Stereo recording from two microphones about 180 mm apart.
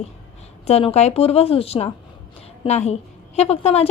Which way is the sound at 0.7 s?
35° left (ahead or behind).